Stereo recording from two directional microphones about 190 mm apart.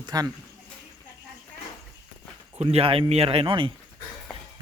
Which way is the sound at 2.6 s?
30° right (ahead or behind).